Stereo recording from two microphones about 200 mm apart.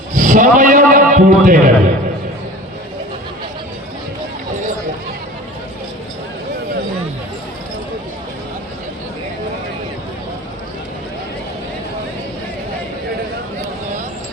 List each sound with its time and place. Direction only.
0.2 s a man's voice: 40° right (ahead or behind)